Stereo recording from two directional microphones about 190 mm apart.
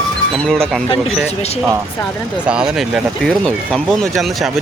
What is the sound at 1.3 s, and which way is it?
Speech, 35° left (ahead or behind).